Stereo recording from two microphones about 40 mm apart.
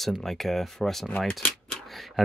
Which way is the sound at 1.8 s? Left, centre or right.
Centre.